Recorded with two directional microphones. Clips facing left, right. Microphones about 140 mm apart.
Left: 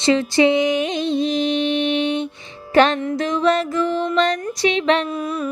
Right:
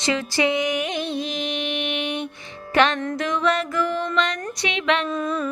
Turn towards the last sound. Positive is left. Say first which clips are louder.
# left 1 dB
turn(degrees=10)  # may be behind; listen again after turning